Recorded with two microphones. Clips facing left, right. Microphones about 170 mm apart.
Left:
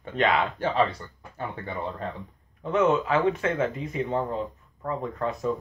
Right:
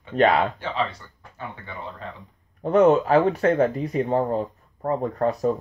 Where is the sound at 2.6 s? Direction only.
40° right (ahead or behind).